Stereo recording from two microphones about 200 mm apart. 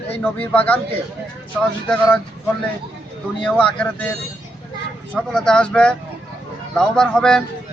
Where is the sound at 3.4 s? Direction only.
5° left (ahead or behind).